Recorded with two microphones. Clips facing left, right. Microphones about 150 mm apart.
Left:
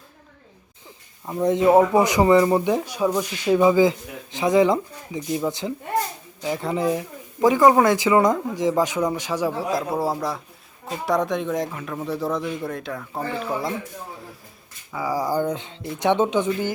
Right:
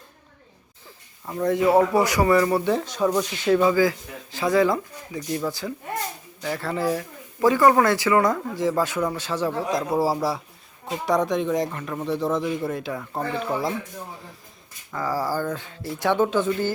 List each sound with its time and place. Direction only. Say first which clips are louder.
0.9 s speech: left 2 dB; 20° left (ahead or behind)
9.9 s speech: right 2 dB; 5° right (ahead or behind)
14.9 s speech: left 2 dB; 10° left (ahead or behind)